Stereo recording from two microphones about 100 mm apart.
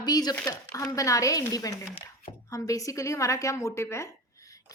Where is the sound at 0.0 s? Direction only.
40° left (ahead or behind).